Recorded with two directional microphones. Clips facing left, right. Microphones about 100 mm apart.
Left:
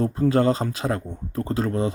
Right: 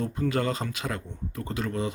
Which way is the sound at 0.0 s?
35° left (ahead or behind).